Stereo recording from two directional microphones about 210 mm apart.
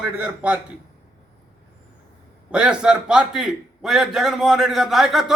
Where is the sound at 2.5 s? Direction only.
5° right (ahead or behind).